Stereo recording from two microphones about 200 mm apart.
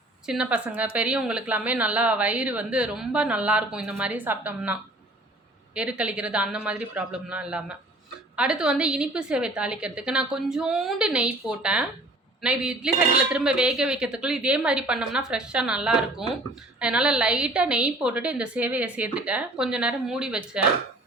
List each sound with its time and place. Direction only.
0.3 s a woman's voice: 5° right (ahead or behind)